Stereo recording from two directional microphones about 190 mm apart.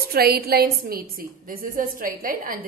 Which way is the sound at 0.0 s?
55° right (ahead or behind).